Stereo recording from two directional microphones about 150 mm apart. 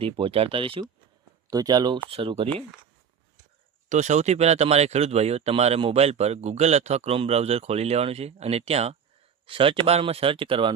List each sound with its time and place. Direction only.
0.0 s speech: 40° right (ahead or behind)
1.5 s speech: 25° right (ahead or behind)
2.0 s speech: 40° right (ahead or behind)
3.8 s speech: 50° right (ahead or behind); by 10.8 s 35° right (ahead or behind)